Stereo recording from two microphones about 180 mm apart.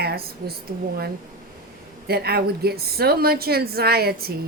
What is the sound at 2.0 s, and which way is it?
A woman's voice, 60° right (ahead or behind).